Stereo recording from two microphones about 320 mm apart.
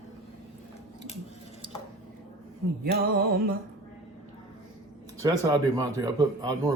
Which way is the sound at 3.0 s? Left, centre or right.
Right.